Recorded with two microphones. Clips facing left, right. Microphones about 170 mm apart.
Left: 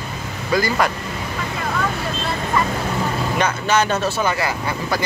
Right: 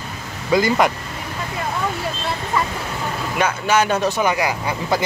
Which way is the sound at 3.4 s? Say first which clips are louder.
Right 2 dB; 10° right (ahead or behind).